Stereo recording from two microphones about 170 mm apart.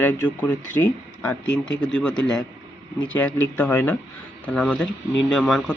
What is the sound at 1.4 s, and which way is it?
Speech, 90° left.